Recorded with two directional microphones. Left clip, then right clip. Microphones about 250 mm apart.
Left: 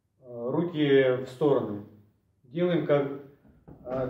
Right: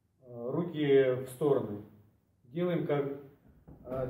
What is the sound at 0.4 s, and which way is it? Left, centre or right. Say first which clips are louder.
Speech: left 6 dB; centre.